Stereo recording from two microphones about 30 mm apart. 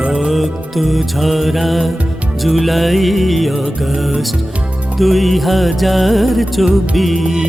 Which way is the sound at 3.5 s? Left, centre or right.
Centre.